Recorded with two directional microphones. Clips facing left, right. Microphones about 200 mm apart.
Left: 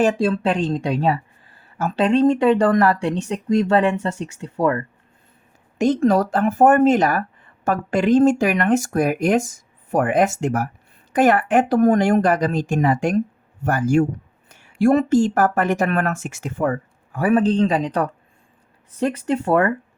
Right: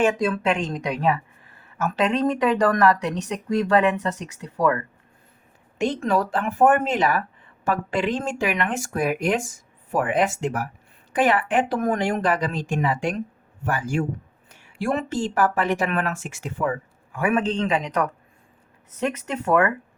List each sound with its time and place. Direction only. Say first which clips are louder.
0.0 s speech: left 3 dB; 35° left (ahead or behind)
5.8 s speech: left 6 dB; 40° left (ahead or behind)